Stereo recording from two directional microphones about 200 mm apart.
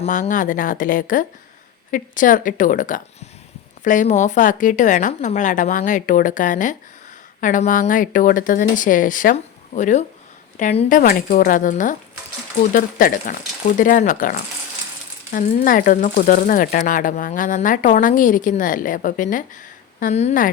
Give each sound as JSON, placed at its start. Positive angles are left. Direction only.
{"t": 0.0, "sound": "speech", "side_deg": 40}